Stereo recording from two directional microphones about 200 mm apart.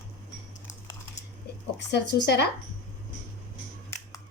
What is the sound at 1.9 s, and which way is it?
Speech, 60° left (ahead or behind).